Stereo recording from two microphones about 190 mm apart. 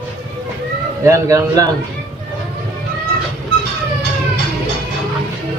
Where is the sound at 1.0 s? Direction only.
15° right (ahead or behind).